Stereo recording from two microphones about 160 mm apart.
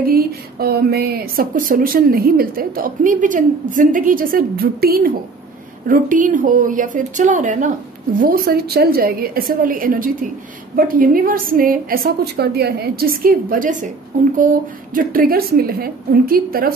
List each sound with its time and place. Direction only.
0.0 s speech: 70° right (ahead or behind); by 7.7 s 50° right (ahead or behind)
8.2 s speech: 65° right (ahead or behind)
15.0 s a woman's voice: 65° right (ahead or behind)